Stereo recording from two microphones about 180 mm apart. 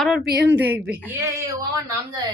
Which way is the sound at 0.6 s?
10° right (ahead or behind).